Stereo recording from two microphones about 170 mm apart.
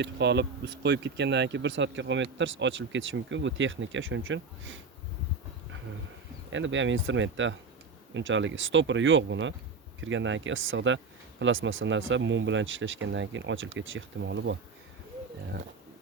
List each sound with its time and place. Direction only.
0.0 s speech: 90° right
6.5 s speech: 90° right